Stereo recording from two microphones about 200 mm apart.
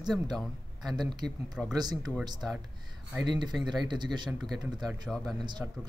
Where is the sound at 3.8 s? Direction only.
20° right (ahead or behind).